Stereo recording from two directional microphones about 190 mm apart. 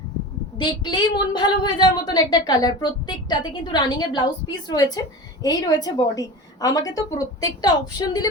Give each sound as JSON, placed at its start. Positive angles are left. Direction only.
{"t": 0.6, "sound": "a woman's voice", "side_deg": 25}